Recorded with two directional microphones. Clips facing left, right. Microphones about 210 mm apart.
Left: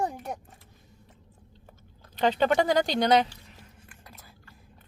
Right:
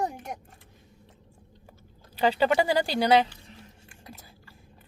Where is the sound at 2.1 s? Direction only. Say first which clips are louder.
Even; 10° right (ahead or behind).